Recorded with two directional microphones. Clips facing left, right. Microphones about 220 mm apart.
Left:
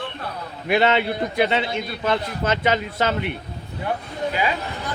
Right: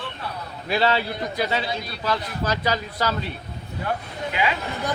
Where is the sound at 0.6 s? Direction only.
20° left (ahead or behind).